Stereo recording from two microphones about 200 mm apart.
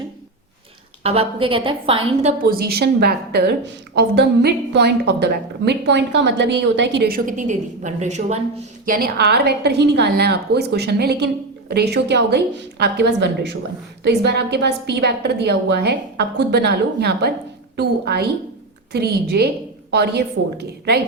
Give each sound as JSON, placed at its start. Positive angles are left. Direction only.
{"t": 1.0, "sound": "a woman's voice", "side_deg": -30}
{"t": 2.4, "sound": "a woman's voice", "side_deg": -50}
{"t": 8.9, "sound": "a woman's voice", "side_deg": -50}